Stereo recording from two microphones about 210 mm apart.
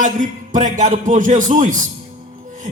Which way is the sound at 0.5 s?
35° right (ahead or behind).